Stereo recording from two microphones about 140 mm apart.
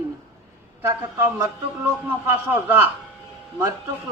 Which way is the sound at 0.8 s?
15° right (ahead or behind).